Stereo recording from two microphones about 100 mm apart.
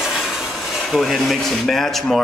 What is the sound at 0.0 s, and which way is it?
Speech, 5° right (ahead or behind).